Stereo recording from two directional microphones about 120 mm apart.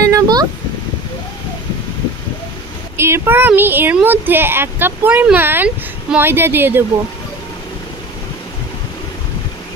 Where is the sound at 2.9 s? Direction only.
20° right (ahead or behind).